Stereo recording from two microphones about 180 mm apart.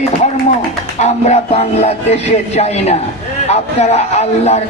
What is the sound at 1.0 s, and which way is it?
A man's voice, 40° left (ahead or behind).